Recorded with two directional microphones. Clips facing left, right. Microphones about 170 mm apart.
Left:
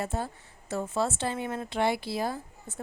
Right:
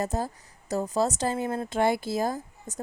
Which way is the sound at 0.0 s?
40° right (ahead or behind).